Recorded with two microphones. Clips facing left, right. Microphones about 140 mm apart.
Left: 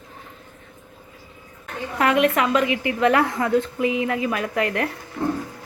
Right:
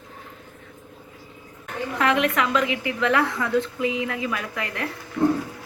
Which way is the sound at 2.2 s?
45° left (ahead or behind).